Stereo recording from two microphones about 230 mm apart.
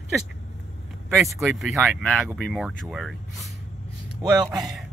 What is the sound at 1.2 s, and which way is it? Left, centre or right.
Speech, centre.